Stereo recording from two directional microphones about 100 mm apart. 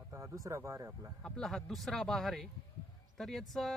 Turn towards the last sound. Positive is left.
turn(degrees=0)  # may be behind; listen again after turning